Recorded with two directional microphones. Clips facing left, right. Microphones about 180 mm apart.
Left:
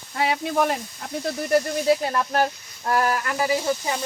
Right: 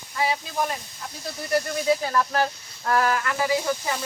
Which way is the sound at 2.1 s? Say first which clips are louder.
Left 1 dB; 25° left (ahead or behind).